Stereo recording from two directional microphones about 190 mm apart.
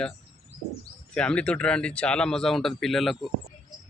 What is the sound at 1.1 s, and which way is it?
Speech, 5° left (ahead or behind).